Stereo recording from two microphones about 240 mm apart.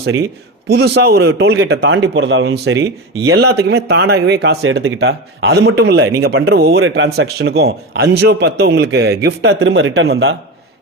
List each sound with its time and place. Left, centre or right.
0.7 s speech: right
1.3 s speech: right